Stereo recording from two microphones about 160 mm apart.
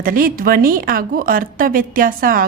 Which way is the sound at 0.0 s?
60° right (ahead or behind).